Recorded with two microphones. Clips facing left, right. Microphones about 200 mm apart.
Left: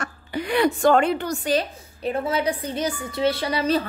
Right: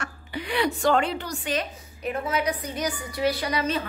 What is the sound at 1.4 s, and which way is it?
A woman's voice, 30° left (ahead or behind).